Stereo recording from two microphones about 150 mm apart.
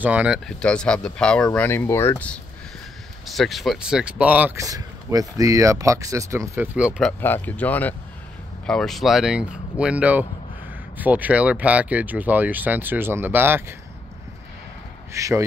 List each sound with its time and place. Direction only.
0.0 s speech: 10° right (ahead or behind)
0.5 s speech: 5° left (ahead or behind)
4.6 s speech: 25° right (ahead or behind)
7.0 s speech: 10° left (ahead or behind); by 13.7 s 15° right (ahead or behind)
15.1 s speech: 20° right (ahead or behind)